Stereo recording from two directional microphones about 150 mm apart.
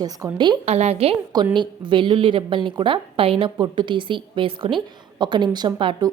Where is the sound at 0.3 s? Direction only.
30° right (ahead or behind).